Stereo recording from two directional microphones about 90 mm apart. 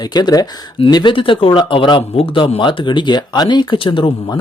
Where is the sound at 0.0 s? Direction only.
50° left (ahead or behind).